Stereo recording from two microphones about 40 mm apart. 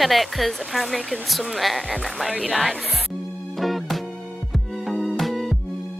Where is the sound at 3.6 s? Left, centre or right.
Centre.